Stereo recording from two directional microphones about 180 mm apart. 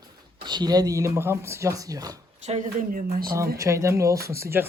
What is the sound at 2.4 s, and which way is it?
Speech, 40° right (ahead or behind).